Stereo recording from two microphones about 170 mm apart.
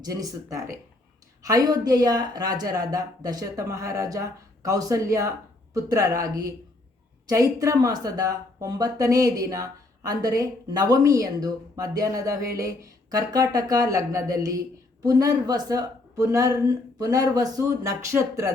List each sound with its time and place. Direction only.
0.0 s speech: 20° right (ahead or behind)